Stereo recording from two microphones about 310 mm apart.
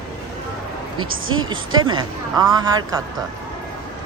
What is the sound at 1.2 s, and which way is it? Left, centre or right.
Speech, right.